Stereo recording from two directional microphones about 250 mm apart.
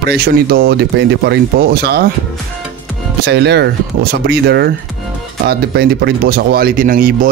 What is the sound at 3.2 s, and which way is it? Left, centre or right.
Speech, right.